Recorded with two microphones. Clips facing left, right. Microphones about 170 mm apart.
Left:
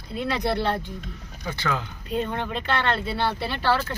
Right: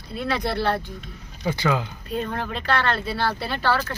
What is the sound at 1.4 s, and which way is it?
Speech, 10° right (ahead or behind).